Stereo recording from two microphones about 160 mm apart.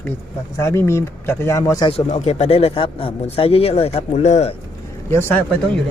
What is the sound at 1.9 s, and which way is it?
Speech, 45° left (ahead or behind).